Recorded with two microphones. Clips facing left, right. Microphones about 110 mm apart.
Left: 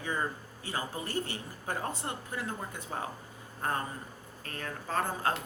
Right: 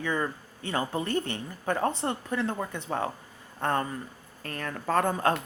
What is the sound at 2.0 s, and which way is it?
A woman's voice, 70° right (ahead or behind).